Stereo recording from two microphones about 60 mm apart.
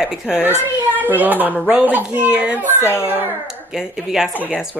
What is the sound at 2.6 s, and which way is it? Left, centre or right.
Speech, left.